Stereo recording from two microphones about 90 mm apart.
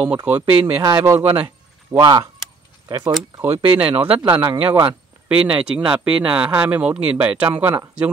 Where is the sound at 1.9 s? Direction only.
90° right.